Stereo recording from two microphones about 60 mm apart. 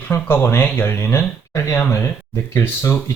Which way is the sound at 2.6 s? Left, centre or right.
Left.